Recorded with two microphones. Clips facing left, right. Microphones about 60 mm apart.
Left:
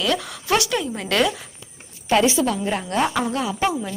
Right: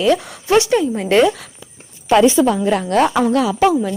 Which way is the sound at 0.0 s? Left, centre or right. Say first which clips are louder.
Right 7 dB; right.